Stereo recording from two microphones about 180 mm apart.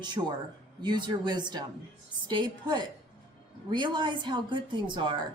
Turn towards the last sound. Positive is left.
turn(degrees=-25)  # may be behind; listen again after turning